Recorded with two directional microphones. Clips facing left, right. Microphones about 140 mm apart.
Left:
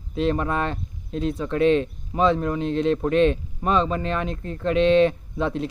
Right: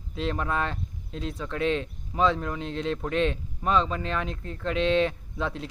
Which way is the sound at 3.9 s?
50° left (ahead or behind).